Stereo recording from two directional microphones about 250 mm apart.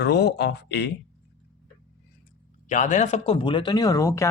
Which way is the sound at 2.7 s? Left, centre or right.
Left.